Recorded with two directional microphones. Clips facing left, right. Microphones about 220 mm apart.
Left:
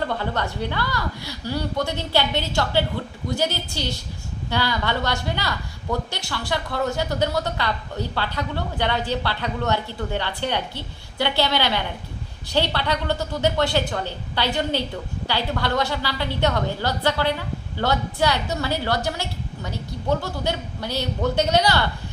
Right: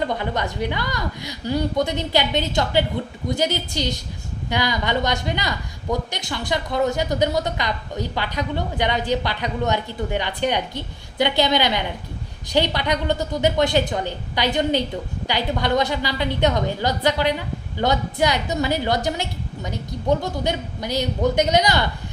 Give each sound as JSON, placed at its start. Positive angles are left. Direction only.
{"t": 0.0, "sound": "a woman's voice", "side_deg": -15}